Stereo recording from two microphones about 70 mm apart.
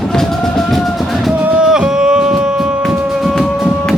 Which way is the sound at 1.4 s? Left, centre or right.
Right.